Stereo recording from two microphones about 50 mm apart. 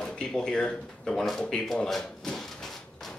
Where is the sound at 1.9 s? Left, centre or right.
Centre.